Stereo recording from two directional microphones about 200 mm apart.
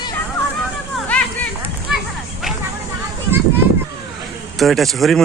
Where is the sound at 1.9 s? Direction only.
5° right (ahead or behind).